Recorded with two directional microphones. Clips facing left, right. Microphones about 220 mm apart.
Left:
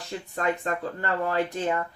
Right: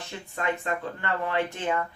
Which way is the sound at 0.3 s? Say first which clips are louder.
Left 2 dB; 40° left (ahead or behind).